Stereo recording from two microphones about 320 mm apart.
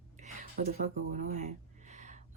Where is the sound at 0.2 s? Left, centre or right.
Right.